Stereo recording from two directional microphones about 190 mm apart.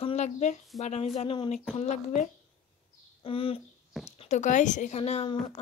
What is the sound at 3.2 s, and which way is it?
Speech, 30° left (ahead or behind).